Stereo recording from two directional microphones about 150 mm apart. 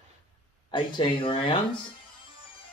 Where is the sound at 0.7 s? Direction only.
35° left (ahead or behind).